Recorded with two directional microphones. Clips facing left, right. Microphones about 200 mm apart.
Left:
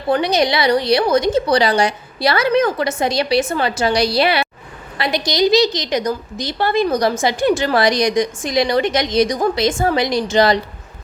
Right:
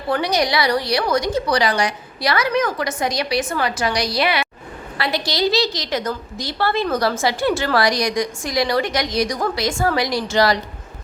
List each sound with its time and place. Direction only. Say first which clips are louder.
0.1 s a woman's voice: left 3 dB; 20° left (ahead or behind)
4.9 s a woman's voice: left 4 dB; 20° left (ahead or behind)